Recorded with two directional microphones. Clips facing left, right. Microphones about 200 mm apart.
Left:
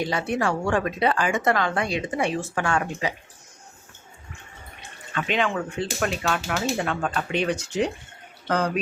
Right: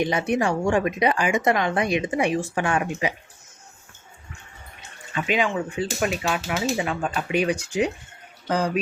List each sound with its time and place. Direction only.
0.0 s speech: 20° right (ahead or behind)
5.1 s speech: 10° right (ahead or behind)